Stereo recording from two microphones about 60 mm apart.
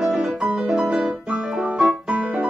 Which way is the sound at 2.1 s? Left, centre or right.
Right.